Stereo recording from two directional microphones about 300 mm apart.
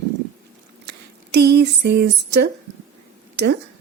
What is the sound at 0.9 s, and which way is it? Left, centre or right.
Speech, right.